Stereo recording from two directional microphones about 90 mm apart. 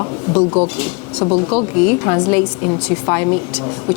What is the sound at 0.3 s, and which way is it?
A woman's voice, 15° left (ahead or behind).